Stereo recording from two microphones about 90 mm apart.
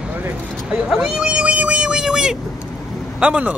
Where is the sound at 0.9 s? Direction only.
5° right (ahead or behind).